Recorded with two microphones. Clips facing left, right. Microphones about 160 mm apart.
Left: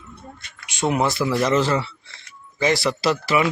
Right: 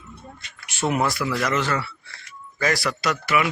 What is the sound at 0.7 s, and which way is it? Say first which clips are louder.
Speech: left 2 dB; 15° left (ahead or behind).